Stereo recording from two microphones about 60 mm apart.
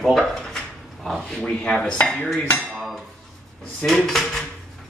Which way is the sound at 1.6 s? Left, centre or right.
Centre.